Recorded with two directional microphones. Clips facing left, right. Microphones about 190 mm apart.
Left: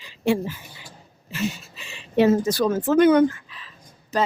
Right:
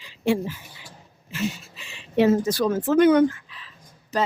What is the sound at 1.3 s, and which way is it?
Speech, 40° left (ahead or behind).